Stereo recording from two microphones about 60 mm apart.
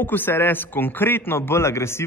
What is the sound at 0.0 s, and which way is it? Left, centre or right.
A man's voice, left.